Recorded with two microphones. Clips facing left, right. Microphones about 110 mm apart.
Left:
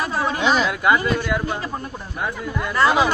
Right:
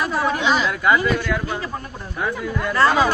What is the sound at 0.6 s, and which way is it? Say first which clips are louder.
Speech: even; 30° left (ahead or behind).